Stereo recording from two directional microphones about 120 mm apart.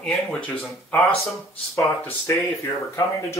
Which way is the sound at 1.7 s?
25° left (ahead or behind).